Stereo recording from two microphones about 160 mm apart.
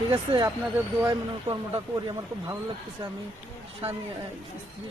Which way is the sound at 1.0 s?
20° right (ahead or behind).